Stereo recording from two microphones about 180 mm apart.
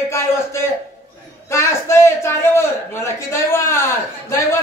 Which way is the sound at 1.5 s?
15° left (ahead or behind).